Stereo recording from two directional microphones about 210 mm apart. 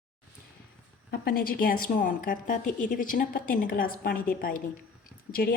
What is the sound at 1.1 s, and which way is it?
A woman's voice, 45° left (ahead or behind).